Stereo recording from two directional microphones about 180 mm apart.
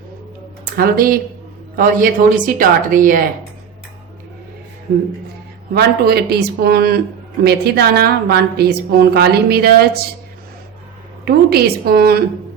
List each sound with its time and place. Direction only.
0.6 s a woman's voice: 55° right (ahead or behind)
5.7 s a woman's voice: 60° right (ahead or behind)
11.3 s a woman's voice: 60° right (ahead or behind)